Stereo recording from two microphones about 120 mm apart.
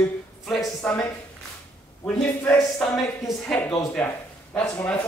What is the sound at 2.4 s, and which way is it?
Speech, 15° left (ahead or behind).